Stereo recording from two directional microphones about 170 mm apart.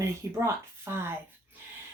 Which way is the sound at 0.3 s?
15° right (ahead or behind).